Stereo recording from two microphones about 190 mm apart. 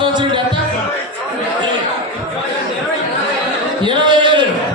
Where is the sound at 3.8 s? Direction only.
25° right (ahead or behind).